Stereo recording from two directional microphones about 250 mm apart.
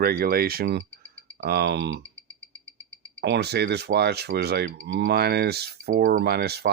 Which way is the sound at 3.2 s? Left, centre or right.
Right.